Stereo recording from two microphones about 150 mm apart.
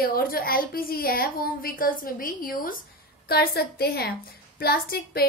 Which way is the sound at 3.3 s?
90° left.